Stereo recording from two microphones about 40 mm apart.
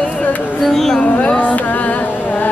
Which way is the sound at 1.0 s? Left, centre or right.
Left.